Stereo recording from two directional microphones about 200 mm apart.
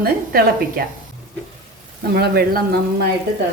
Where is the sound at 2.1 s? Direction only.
50° right (ahead or behind).